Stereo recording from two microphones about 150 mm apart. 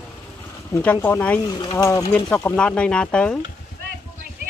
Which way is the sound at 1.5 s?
30° left (ahead or behind).